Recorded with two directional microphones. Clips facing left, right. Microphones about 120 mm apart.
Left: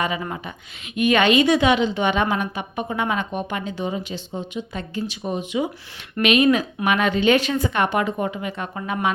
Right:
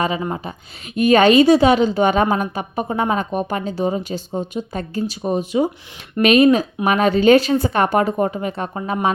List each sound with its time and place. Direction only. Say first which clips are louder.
0.2 s a woman's voice: right 5 dB; 30° right (ahead or behind)